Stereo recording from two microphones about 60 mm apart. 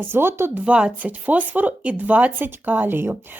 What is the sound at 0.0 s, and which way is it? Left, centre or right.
Speech, right.